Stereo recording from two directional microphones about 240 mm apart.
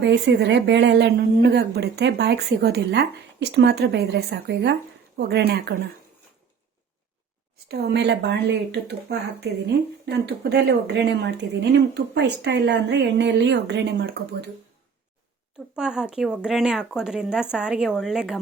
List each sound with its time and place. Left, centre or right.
0.0 s speech: right
7.7 s speech: right
15.7 s speech: centre